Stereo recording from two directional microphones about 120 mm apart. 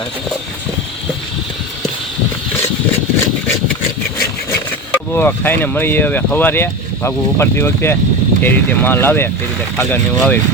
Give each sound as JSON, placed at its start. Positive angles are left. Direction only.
{"t": 4.9, "sound": "speech", "side_deg": 15}